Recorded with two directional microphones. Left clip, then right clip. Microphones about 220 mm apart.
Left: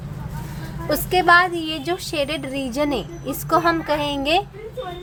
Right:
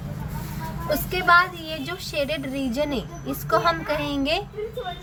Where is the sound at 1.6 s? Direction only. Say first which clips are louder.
Left 6 dB; 55° left (ahead or behind).